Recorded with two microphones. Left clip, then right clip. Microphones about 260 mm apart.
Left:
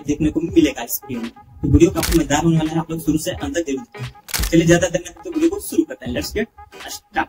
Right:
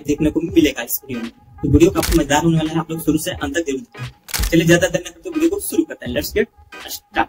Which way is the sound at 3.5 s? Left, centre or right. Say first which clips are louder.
Right 1 dB; centre.